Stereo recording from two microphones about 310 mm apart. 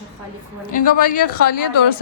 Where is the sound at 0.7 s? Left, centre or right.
Left.